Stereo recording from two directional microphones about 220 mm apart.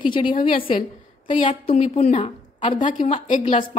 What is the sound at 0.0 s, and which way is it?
A woman's voice, 20° left (ahead or behind).